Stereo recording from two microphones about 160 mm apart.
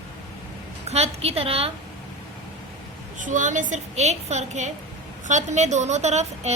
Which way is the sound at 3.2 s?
55° right (ahead or behind).